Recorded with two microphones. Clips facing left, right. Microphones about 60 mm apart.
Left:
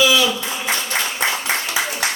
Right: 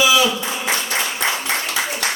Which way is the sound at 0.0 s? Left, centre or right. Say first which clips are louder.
Right 1 dB; centre.